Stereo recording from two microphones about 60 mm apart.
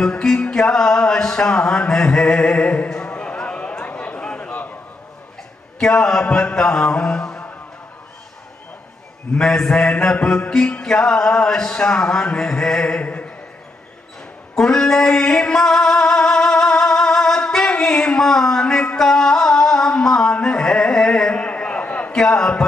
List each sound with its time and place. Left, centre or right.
0.0 s music: centre
4.5 s a sound: left
5.8 s music: centre
9.3 s music: centre
14.5 s music: centre
22.1 s music: centre